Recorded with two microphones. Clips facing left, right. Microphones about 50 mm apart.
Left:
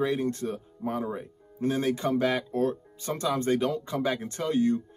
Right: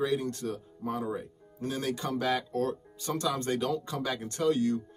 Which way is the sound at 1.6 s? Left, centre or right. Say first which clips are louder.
Left 6 dB; left.